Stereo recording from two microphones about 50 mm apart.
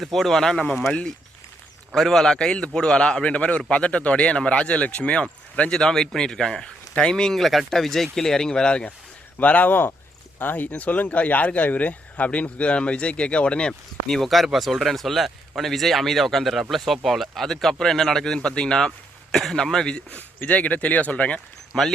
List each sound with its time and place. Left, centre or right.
0.0 s speech: centre
2.0 s speech: centre; by 5.2 s left
5.7 s speech: centre
9.4 s speech: left
10.7 s speech: left
14.1 s speech: centre
20.1 s speech: left
21.7 s speech: centre